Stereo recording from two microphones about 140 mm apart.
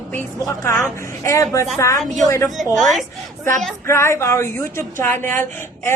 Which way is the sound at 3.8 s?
20° left (ahead or behind).